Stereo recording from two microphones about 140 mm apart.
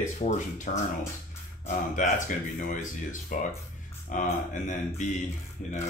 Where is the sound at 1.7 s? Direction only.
65° left (ahead or behind).